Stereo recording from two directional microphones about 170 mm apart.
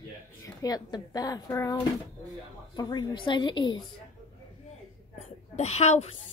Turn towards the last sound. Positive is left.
turn(degrees=40)  # may be behind; listen again after turning